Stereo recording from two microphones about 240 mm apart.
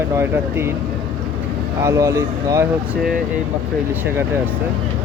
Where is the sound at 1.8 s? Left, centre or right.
Centre.